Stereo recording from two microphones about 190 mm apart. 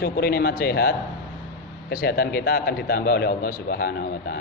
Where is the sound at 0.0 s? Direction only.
55° left (ahead or behind).